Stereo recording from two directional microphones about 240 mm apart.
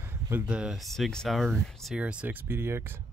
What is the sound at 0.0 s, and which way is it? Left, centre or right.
Speech, centre.